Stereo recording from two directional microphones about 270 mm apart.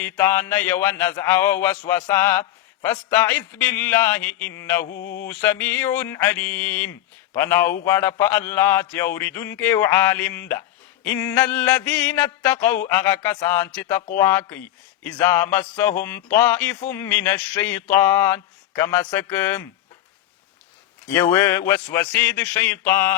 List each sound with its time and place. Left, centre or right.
0.0 s speech: centre
4.9 s mantra: left
5.1 s speech: centre
21.1 s speech: centre